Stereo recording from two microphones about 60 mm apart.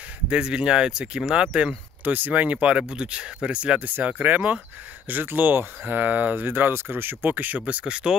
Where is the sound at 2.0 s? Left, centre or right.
Right.